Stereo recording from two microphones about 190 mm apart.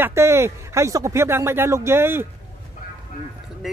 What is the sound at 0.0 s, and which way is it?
Speech, 15° right (ahead or behind).